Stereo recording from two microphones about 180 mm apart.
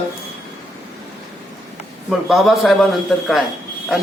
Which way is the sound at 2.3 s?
Centre (ahead or behind).